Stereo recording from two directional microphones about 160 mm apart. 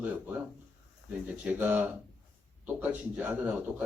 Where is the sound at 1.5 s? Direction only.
10° right (ahead or behind).